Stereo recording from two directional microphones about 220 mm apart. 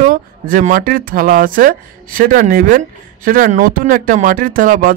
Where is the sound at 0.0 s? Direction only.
35° right (ahead or behind).